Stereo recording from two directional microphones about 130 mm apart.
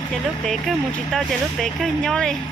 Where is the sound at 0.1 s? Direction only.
Centre (ahead or behind).